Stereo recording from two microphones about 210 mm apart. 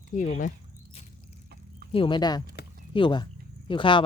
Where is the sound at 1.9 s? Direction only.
25° left (ahead or behind).